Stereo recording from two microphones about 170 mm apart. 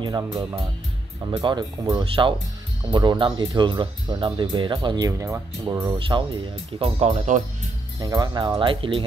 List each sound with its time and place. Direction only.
1.3 s speech: 30° right (ahead or behind)
5.9 s speech: 30° right (ahead or behind); by 7.4 s 45° right (ahead or behind)
8.0 s speech: 25° right (ahead or behind)